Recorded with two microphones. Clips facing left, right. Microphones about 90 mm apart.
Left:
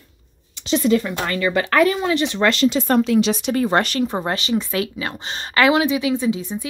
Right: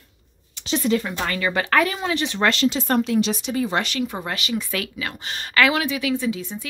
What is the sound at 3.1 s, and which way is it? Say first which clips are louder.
Speech: left 4 dB; 85° left.